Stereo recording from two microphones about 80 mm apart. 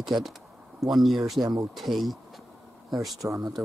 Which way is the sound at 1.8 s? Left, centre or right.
Centre.